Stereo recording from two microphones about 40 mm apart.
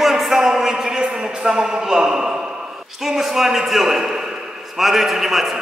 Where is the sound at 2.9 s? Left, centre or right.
Centre.